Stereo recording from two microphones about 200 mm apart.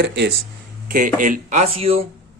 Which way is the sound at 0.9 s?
45° right (ahead or behind).